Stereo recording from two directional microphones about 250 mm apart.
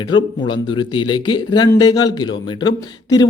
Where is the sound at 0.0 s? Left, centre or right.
Centre.